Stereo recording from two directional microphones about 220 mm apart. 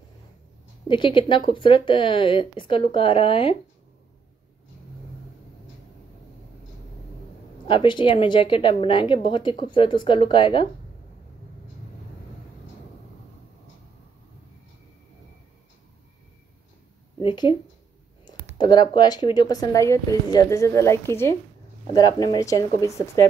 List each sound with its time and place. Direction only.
0.8 s a woman's voice: 20° left (ahead or behind)
7.6 s a woman's voice: 20° left (ahead or behind)
17.2 s speech: 20° left (ahead or behind)
18.6 s speech: 20° left (ahead or behind)